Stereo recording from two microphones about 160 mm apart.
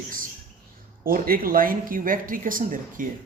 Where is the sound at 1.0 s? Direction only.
65° right (ahead or behind).